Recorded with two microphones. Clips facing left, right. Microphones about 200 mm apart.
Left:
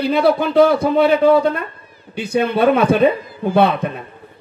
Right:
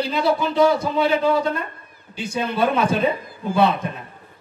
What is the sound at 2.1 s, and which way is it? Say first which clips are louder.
Speech: left 7 dB; 60° left (ahead or behind).